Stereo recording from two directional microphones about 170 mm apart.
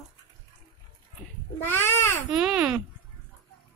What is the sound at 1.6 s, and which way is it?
Babbling, 15° left (ahead or behind).